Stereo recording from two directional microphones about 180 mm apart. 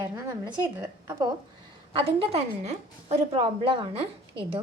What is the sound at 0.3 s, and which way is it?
A woman's voice, 20° right (ahead or behind).